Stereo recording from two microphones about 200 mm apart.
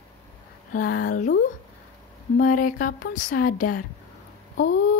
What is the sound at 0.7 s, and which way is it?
Speech, 45° left (ahead or behind).